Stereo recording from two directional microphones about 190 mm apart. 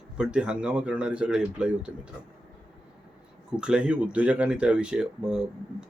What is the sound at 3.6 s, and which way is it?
Speech, 5° right (ahead or behind).